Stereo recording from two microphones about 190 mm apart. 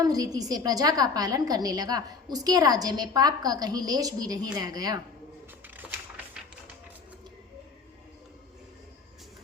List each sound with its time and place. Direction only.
0.0 s a woman's voice: 20° right (ahead or behind)